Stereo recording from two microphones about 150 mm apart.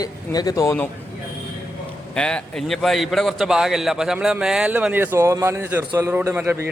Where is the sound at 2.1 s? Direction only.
5° left (ahead or behind).